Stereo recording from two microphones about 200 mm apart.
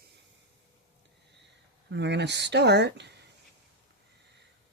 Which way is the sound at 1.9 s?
60° right (ahead or behind).